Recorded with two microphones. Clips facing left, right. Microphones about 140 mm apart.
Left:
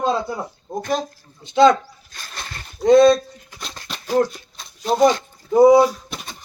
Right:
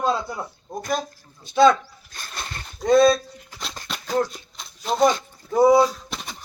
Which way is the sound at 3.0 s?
5° right (ahead or behind).